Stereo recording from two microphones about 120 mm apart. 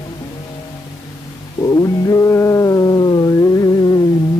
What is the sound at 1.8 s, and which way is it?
Music, 30° left (ahead or behind).